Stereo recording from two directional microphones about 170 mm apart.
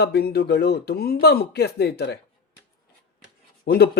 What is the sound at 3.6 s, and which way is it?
Speech, 65° left (ahead or behind).